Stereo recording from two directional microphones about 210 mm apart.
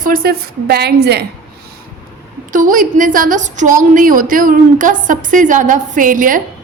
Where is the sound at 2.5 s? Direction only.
40° right (ahead or behind).